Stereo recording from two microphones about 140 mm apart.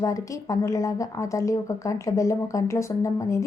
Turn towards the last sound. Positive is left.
turn(degrees=20)  # may be behind; listen again after turning